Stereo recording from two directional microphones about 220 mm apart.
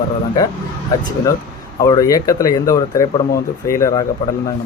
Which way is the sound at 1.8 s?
15° left (ahead or behind).